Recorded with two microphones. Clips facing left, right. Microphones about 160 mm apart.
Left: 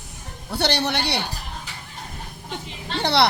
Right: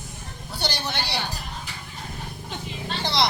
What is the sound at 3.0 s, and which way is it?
Speech, 65° left (ahead or behind).